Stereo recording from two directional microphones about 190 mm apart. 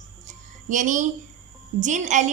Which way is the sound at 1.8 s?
40° right (ahead or behind).